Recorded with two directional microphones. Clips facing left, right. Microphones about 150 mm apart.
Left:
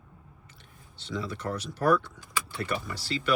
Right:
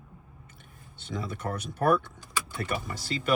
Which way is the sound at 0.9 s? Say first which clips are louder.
Left 1 dB; 50° right (ahead or behind).